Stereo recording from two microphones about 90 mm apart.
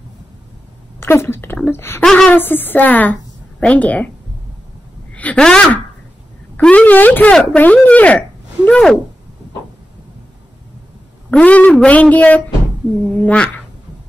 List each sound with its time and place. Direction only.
0.9 s a woman's voice: 25° left (ahead or behind)
2.0 s speech: 5° left (ahead or behind)
2.3 s a woman's voice: 20° left (ahead or behind)
5.1 s speech: 15° left (ahead or behind)
11.2 s speech: 15° left (ahead or behind)